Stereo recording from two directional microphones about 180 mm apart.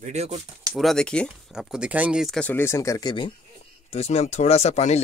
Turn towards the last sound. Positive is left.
turn(degrees=40)  # may be behind; listen again after turning